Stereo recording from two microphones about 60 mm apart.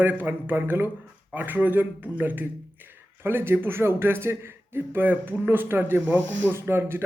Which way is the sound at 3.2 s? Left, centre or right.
Right.